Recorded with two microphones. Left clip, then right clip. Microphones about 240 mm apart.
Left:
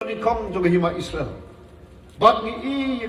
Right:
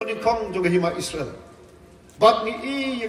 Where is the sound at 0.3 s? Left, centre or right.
Left.